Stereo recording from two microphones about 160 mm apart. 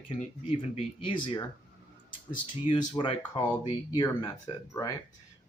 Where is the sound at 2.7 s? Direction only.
30° left (ahead or behind).